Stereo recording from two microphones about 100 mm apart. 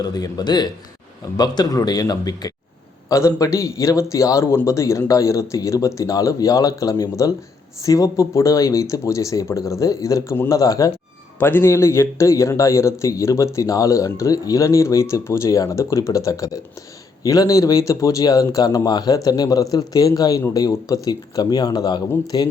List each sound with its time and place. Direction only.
0.0 s a man's voice: 40° left (ahead or behind)
11.3 s a man's voice: 20° left (ahead or behind); by 22.5 s 50° left (ahead or behind)